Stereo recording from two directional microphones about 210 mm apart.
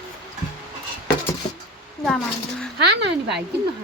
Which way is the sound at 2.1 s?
5° left (ahead or behind).